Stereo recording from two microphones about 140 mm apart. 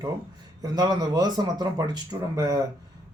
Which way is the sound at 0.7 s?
30° right (ahead or behind).